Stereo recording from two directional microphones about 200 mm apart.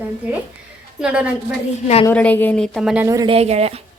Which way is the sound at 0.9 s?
5° right (ahead or behind).